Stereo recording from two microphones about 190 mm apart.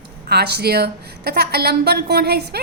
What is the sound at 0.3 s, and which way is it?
A woman's voice, 60° right (ahead or behind).